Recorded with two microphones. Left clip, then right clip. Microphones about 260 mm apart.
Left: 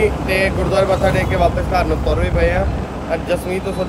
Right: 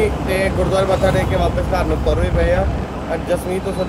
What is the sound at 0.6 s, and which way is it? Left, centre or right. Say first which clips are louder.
Speech: even; left.